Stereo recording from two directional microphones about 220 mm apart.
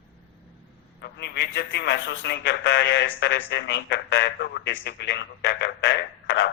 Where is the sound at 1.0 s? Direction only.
50° left (ahead or behind).